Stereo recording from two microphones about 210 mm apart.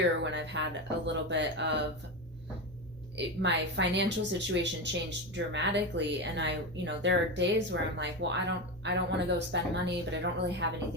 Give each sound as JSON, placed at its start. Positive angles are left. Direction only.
{"t": 0.2, "sound": "speech", "side_deg": -60}
{"t": 3.2, "sound": "speech", "side_deg": -55}